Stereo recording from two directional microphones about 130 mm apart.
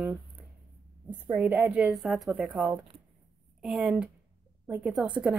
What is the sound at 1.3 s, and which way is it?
Speech, 10° right (ahead or behind).